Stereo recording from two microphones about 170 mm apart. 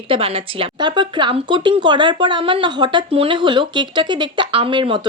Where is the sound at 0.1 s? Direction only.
35° right (ahead or behind).